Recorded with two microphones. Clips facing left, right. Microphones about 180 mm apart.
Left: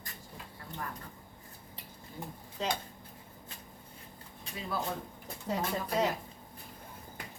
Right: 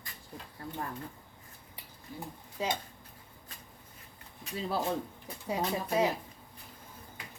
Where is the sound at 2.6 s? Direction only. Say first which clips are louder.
Right 1 dB; 10° right (ahead or behind).